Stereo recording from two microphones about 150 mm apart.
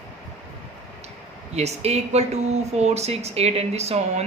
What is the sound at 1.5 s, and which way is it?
Speech, 45° right (ahead or behind).